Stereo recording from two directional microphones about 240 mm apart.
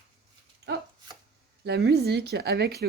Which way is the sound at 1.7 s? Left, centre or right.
Right.